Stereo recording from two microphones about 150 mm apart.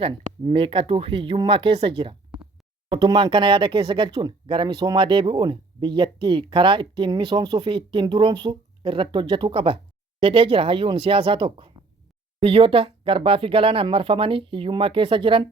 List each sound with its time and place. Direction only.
0.0 s speech: 35° right (ahead or behind)